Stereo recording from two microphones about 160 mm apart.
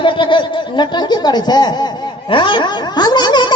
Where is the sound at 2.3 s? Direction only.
30° left (ahead or behind).